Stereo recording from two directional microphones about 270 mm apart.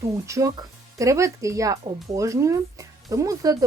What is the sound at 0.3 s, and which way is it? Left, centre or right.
Speech, centre.